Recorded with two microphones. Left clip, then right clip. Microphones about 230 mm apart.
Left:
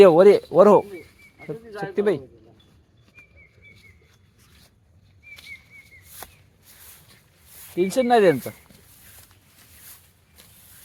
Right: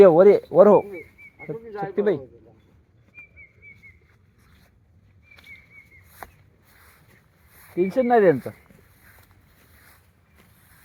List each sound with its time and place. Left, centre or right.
0.0 s speech: centre
7.8 s speech: centre